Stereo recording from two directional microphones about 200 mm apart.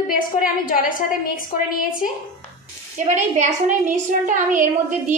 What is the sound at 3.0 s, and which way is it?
A woman's voice, 35° right (ahead or behind).